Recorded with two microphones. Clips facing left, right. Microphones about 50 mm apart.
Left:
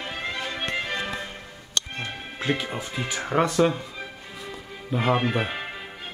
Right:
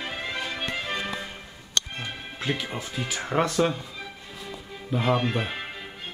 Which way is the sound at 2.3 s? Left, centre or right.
Left.